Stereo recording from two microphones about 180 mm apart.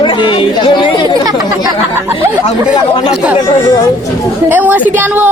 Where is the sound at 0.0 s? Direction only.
25° left (ahead or behind).